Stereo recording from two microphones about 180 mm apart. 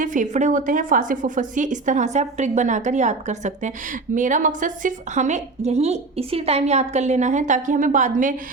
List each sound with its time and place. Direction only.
0.0 s a woman's voice: 45° right (ahead or behind)